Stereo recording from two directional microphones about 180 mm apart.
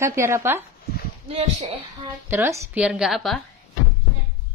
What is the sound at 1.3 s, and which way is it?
Speech, 35° right (ahead or behind).